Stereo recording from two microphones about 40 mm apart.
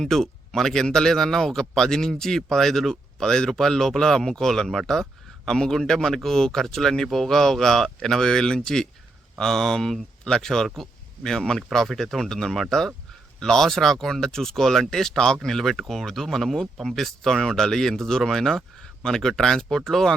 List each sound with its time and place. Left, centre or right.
0.0 s speech: centre